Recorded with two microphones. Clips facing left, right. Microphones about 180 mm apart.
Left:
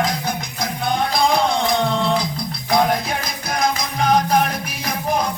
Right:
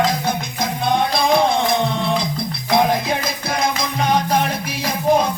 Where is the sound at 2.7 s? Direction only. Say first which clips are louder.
Right 1 dB; 25° right (ahead or behind).